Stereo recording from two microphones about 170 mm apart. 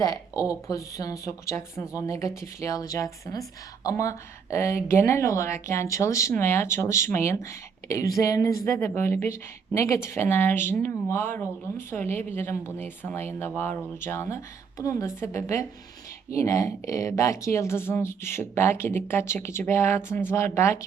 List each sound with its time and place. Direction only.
0.0 s a woman's voice: 20° left (ahead or behind)